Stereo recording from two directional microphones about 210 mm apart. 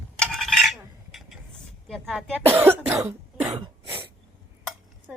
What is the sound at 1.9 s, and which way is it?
Speech, centre (ahead or behind).